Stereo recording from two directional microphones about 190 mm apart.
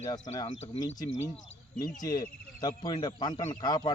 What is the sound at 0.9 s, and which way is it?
A man's voice, 20° left (ahead or behind).